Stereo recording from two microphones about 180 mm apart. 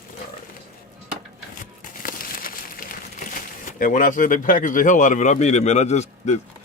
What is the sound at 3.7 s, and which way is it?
A man's voice, 45° left (ahead or behind).